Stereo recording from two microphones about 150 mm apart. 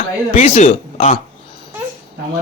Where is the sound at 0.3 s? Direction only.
55° left (ahead or behind).